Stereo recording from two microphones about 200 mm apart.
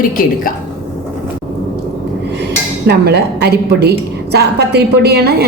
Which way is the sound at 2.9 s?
55° right (ahead or behind).